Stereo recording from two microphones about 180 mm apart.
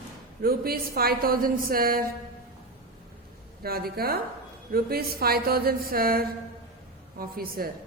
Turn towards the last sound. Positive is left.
turn(degrees=-55)  # may be behind; listen again after turning